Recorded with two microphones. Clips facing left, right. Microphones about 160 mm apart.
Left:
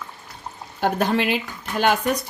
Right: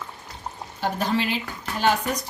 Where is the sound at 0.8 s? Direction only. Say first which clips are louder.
Left 4 dB; 60° left (ahead or behind).